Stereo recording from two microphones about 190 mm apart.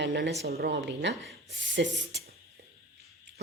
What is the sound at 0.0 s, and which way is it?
Speech, 65° right (ahead or behind).